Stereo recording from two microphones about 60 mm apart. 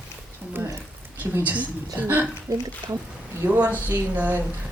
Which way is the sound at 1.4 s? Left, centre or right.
Right.